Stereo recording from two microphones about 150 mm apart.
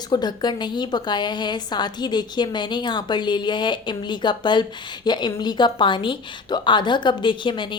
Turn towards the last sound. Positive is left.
turn(degrees=30)  # may be behind; listen again after turning